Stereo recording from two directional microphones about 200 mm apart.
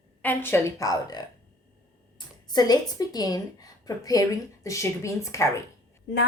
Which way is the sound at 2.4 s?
20° left (ahead or behind).